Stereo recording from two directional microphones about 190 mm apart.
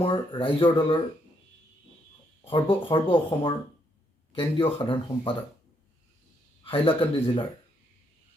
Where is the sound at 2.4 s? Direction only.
25° left (ahead or behind).